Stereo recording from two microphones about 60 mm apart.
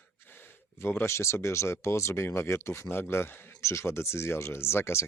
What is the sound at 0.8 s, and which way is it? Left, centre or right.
Speech, left.